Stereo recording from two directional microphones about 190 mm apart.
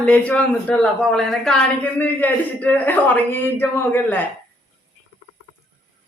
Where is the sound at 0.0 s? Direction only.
5° left (ahead or behind).